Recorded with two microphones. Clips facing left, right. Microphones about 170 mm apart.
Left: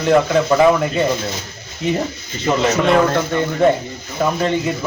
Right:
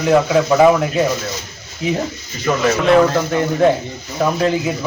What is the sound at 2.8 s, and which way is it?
Speech, centre (ahead or behind).